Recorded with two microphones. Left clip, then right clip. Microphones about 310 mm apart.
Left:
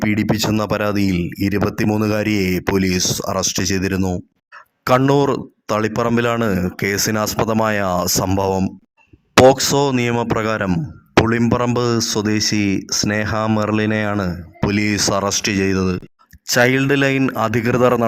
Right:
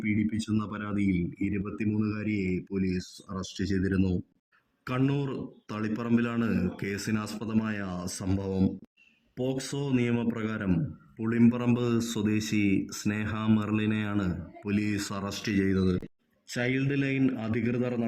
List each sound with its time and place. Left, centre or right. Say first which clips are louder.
0.0 s speech: left 13 dB; left